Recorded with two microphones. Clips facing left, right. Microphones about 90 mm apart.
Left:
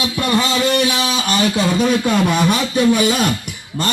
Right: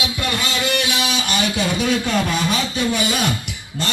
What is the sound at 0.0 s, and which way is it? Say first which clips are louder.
Speech: left 6 dB; 40° left (ahead or behind).